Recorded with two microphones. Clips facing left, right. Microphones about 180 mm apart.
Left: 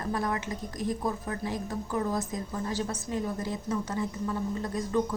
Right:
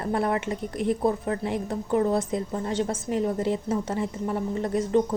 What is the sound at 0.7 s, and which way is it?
Speech, 70° right (ahead or behind).